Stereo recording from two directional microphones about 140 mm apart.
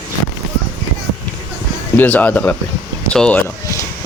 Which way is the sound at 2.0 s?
10° left (ahead or behind).